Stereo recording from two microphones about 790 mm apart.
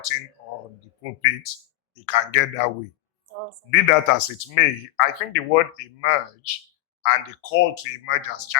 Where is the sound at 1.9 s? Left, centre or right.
Left.